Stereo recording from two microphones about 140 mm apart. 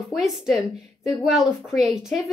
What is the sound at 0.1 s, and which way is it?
A woman's voice, centre (ahead or behind).